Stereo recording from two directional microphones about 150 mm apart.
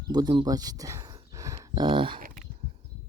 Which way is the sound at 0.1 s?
30° right (ahead or behind).